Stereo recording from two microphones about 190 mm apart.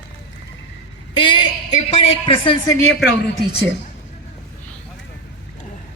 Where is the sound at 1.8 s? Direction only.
35° left (ahead or behind).